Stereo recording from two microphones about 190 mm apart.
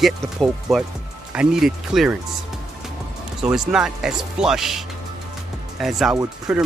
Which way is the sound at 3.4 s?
5° right (ahead or behind).